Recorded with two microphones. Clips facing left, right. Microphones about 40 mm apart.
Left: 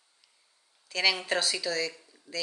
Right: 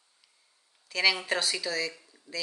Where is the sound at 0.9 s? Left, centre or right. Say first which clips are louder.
Right 1 dB; centre.